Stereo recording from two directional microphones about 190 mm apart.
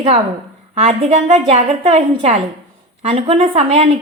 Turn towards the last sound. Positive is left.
turn(degrees=-30)  # may be behind; listen again after turning